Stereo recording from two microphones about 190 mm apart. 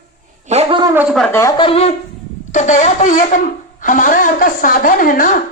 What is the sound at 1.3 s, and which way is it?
A man's voice, 15° left (ahead or behind).